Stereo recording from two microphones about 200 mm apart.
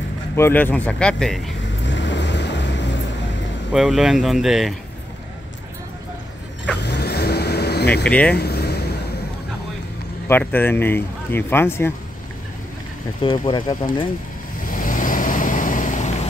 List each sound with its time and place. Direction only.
0.4 s speech: 10° left (ahead or behind)
1.9 s vehicle: 65° left (ahead or behind)
3.7 s speech: centre (ahead or behind)
6.8 s vehicle: 55° left (ahead or behind)
7.9 s speech: 5° left (ahead or behind)
8.4 s a sound: 55° left (ahead or behind)
10.2 s speech: 10° left (ahead or behind)
13.5 s speech: 25° left (ahead or behind)
14.7 s vehicle: 40° left (ahead or behind)